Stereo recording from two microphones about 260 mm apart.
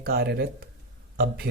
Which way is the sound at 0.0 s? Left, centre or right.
Right.